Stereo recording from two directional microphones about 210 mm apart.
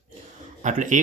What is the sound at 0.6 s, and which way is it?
Speech, 35° right (ahead or behind).